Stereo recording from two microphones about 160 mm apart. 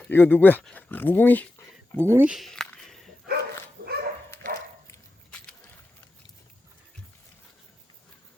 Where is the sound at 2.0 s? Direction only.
15° right (ahead or behind).